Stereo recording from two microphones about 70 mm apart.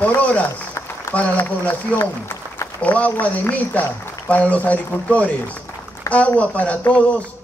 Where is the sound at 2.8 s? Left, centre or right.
Left.